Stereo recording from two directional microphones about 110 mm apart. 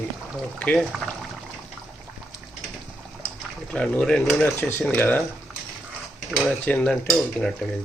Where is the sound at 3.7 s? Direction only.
5° left (ahead or behind).